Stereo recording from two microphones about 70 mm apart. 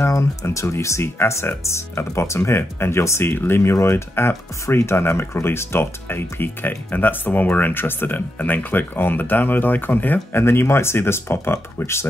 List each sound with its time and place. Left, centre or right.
0.0 s speech: left